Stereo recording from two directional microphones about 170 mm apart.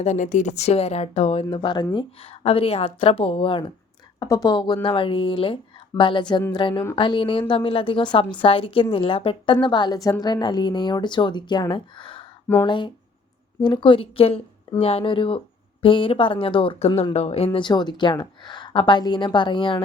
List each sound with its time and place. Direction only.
0.0 s a woman's voice: 45° left (ahead or behind)